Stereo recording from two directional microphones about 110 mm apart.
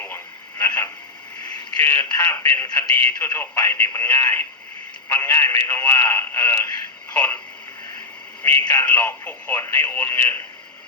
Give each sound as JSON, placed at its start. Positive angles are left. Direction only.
{"t": 0.6, "sound": "radio", "side_deg": 15}
{"t": 1.8, "sound": "speech", "side_deg": 20}
{"t": 8.7, "sound": "speech", "side_deg": 15}